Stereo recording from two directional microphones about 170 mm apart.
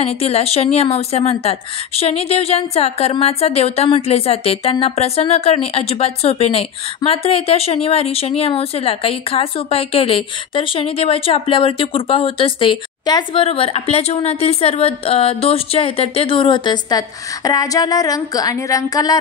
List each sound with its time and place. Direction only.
0.0 s a woman's voice: 35° left (ahead or behind); by 19.1 s 20° left (ahead or behind)